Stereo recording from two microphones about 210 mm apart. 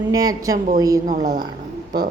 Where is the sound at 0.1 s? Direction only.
15° right (ahead or behind).